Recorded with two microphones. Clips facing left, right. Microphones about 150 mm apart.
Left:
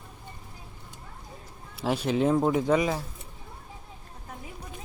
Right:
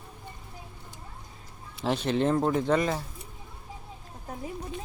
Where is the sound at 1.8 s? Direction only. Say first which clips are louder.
Left 1 dB; 5° left (ahead or behind).